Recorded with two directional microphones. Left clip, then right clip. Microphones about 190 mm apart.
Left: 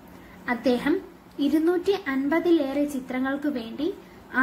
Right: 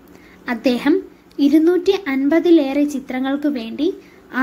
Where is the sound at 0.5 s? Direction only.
30° right (ahead or behind).